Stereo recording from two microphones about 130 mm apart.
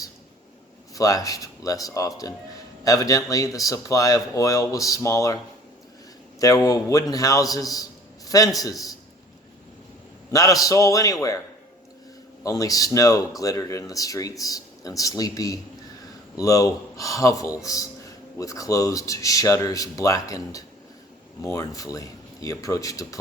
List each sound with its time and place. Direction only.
0.9 s speech: 25° left (ahead or behind)
6.4 s speech: 25° left (ahead or behind)
10.3 s speech: 25° left (ahead or behind)